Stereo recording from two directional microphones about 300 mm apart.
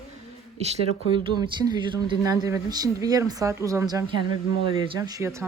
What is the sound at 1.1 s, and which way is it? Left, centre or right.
Speech, centre.